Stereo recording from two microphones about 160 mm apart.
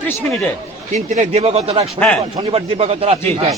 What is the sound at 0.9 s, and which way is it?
A man's voice, 50° right (ahead or behind).